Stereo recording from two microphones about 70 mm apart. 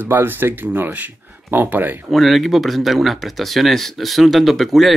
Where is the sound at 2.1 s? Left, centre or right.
Centre.